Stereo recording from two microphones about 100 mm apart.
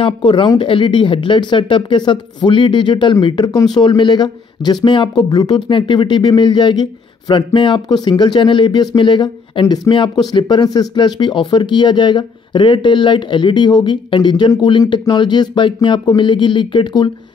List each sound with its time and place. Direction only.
0.0 s speech: 55° left (ahead or behind)